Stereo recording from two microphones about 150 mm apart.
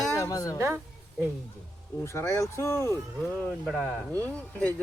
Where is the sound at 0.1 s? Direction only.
20° left (ahead or behind).